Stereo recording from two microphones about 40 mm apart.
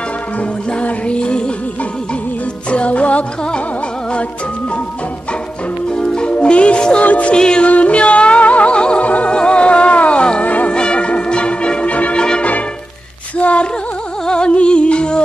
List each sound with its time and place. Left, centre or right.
0.4 s music: left
2.7 s music: left
5.9 s music: left
7.0 s music: left
7.3 s music: left
7.6 s music: left
10.4 s music: left
10.7 s music: left
11.9 s music: left
12.2 s music: left
13.4 s a sound: left
14.2 s music: left